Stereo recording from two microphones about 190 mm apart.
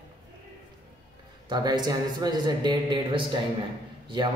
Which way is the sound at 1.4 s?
20° right (ahead or behind).